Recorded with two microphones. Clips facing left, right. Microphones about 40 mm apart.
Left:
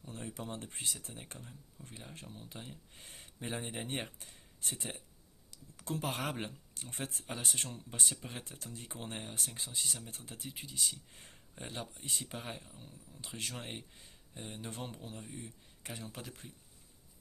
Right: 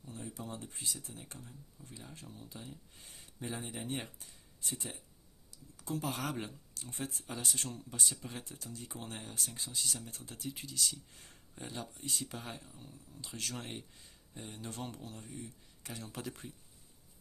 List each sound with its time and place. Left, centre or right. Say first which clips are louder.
0.0 s speech: left 1 dB; left
6.9 s speech: even; left
10.5 s speech: right 1 dB; centre
10.8 s speech: left 1 dB; left
11.2 s a sound: left 1 dB; left
11.6 s speech: even; left
12.7 s speech: right 1 dB; left
16.0 s speech: right 3 dB; centre